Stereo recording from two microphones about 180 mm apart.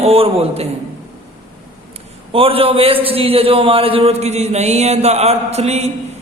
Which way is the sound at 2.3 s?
30° right (ahead or behind).